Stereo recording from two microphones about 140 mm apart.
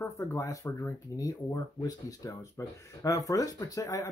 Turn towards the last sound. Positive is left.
turn(degrees=25)  # may be behind; listen again after turning